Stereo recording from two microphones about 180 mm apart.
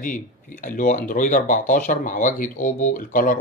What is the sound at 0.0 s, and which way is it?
Speech, 45° left (ahead or behind).